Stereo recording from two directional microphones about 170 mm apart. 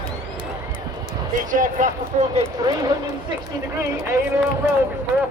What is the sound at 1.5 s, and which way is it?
Speech, 50° right (ahead or behind).